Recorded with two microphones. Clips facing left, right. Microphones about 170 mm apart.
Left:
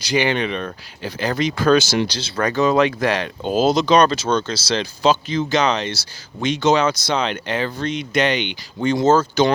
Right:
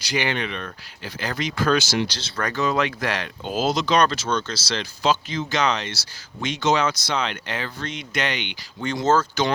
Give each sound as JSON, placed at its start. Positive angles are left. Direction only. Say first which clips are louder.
{"t": 0.1, "sound": "speech", "louder": "left 6 dB", "side_deg": 20}
{"t": 2.0, "sound": "speech", "louder": "left 6 dB", "side_deg": 10}
{"t": 2.4, "sound": "speech", "louder": "left 6 dB", "side_deg": 20}
{"t": 3.9, "sound": "speech", "louder": "left 5 dB", "side_deg": 30}